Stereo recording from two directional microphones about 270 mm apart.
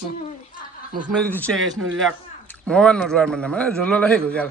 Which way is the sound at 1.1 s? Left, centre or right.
Centre.